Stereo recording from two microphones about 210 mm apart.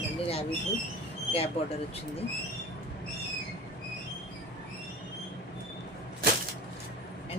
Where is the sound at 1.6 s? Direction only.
30° left (ahead or behind).